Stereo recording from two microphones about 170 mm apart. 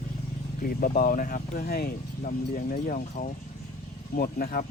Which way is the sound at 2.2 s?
50° left (ahead or behind).